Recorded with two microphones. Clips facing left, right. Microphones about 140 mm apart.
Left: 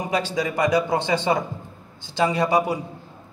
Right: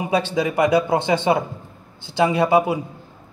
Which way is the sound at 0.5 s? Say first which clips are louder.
Right 3 dB; 20° right (ahead or behind).